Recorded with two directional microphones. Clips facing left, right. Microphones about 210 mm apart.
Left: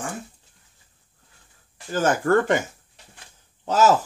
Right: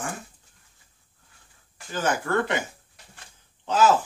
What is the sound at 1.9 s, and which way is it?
Speech, 45° left (ahead or behind).